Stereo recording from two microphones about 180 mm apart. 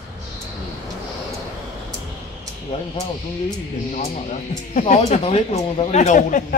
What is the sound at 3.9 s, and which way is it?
Speech, 40° left (ahead or behind).